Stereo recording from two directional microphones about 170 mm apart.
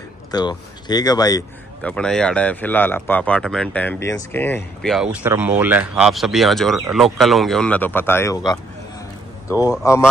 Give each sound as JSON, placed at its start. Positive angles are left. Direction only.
{"t": 0.3, "sound": "speech", "side_deg": 25}
{"t": 1.8, "sound": "speech", "side_deg": 5}
{"t": 4.8, "sound": "speech", "side_deg": -5}
{"t": 9.5, "sound": "speech", "side_deg": -10}